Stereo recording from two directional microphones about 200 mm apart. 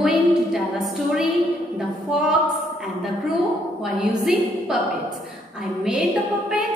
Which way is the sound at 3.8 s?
5° right (ahead or behind).